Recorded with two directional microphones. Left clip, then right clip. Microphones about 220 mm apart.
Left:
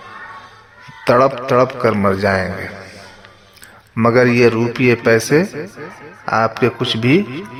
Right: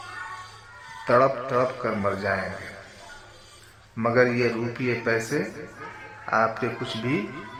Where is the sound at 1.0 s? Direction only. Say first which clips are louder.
Left 7 dB; 45° left (ahead or behind).